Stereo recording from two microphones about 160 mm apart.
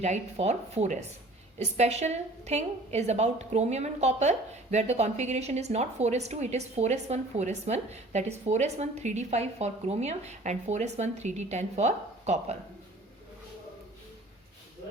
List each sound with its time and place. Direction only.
0.0 s a woman's voice: 45° right (ahead or behind)